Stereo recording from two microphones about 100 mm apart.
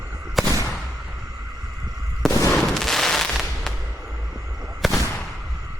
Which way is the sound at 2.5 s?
5° left (ahead or behind).